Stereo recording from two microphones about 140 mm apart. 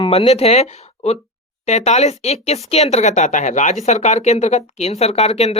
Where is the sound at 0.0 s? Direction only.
45° left (ahead or behind).